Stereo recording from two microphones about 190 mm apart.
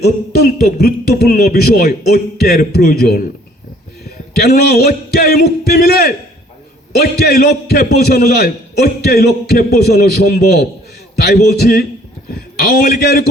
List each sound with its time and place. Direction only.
0.0 s a man's voice: 55° left (ahead or behind)
4.4 s a man's voice: 55° left (ahead or behind)